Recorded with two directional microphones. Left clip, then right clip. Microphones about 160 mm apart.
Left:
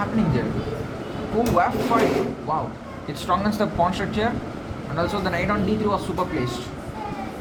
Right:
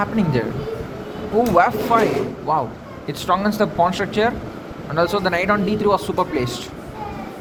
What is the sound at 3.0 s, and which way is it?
Speech, 45° right (ahead or behind).